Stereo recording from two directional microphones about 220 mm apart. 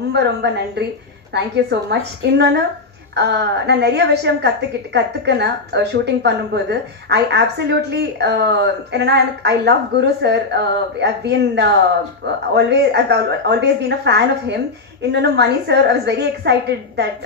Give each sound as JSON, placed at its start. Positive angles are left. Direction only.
{"t": 0.1, "sound": "a woman's voice", "side_deg": -50}